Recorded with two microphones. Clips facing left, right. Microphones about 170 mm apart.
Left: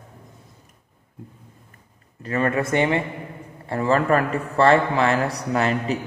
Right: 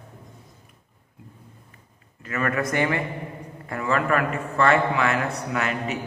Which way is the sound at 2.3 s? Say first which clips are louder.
Left 4 dB; 30° left (ahead or behind).